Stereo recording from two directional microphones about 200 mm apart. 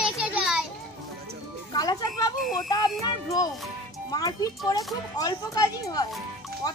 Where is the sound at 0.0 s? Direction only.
5° right (ahead or behind).